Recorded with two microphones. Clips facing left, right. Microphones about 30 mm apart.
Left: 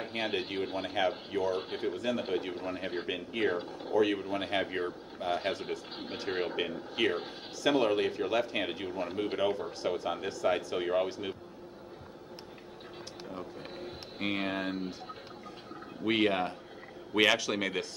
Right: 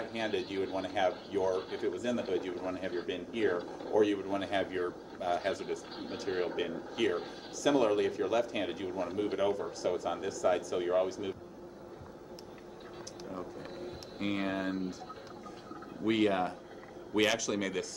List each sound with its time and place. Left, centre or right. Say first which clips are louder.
0.0 s speech: left 1 dB; left
13.3 s a sound: right 1 dB; left
16.0 s speech: left 1 dB; left